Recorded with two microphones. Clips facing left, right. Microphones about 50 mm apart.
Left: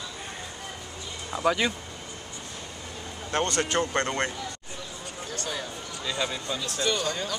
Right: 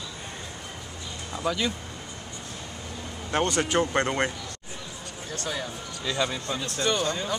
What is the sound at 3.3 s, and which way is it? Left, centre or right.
Speech, centre.